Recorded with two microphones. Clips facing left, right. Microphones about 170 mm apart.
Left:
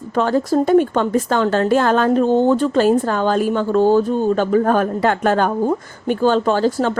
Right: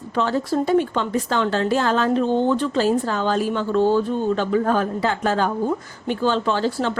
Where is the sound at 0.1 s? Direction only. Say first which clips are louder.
Left 5 dB; 45° left (ahead or behind).